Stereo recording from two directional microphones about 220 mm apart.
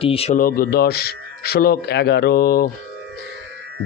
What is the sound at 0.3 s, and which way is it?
Speech, 40° left (ahead or behind).